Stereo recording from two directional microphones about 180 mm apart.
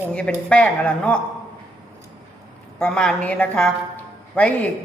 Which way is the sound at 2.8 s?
5° left (ahead or behind).